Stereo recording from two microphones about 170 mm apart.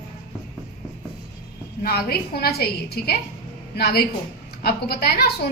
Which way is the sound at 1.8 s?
65° left (ahead or behind).